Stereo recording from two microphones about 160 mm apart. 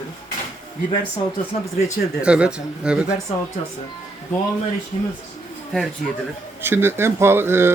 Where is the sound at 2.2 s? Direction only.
5° right (ahead or behind).